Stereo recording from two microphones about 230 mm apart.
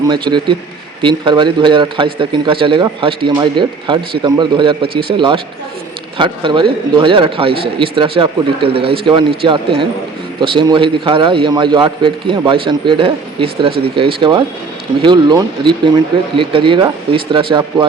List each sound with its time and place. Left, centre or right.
0.1 s speech: centre